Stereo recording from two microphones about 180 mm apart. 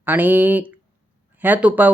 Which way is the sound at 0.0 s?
10° right (ahead or behind).